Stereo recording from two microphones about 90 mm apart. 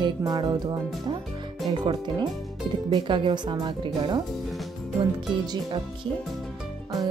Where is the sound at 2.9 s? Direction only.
65° right (ahead or behind).